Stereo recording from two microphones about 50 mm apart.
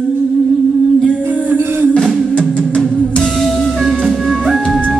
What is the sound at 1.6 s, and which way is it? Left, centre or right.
Music, right.